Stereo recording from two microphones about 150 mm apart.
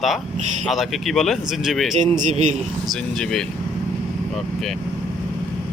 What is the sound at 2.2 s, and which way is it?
Speech, 50° right (ahead or behind).